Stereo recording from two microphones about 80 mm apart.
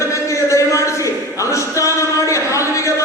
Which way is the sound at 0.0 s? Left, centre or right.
Left.